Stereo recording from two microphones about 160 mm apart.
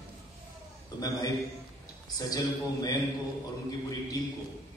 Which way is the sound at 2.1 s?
25° left (ahead or behind).